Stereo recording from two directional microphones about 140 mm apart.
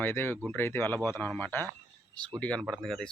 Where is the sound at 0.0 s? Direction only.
15° left (ahead or behind).